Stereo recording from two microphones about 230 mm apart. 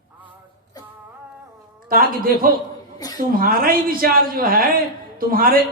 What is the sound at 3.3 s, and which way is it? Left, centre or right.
A man's voice, right.